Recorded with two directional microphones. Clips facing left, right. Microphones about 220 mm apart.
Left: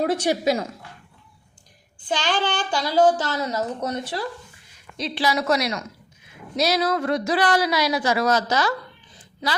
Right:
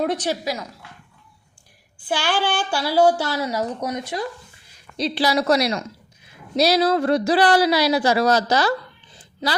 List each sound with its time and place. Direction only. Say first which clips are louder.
0.0 s a woman's voice: even; 5° left (ahead or behind)
0.3 s a woman's voice: left 4 dB; 25° left (ahead or behind)
2.0 s a woman's voice: right 1 dB; 10° right (ahead or behind)
4.9 s speech: right 3 dB; 35° right (ahead or behind)